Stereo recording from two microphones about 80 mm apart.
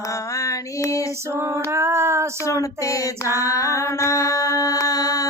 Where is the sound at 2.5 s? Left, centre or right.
Left.